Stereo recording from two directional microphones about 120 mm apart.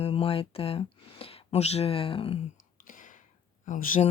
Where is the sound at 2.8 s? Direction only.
90° left.